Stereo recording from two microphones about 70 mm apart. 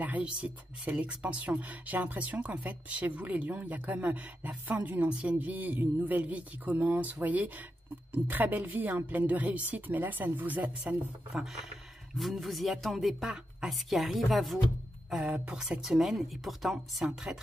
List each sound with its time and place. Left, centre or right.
0.0 s speech: centre
12.2 s speech: centre
15.3 s speech: centre
15.8 s speech: centre